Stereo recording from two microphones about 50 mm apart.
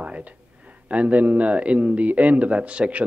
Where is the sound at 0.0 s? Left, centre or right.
Right.